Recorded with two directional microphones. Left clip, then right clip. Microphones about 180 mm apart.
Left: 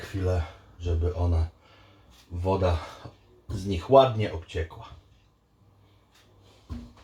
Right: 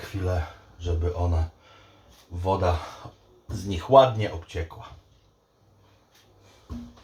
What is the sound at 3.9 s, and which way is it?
Speech, 10° left (ahead or behind).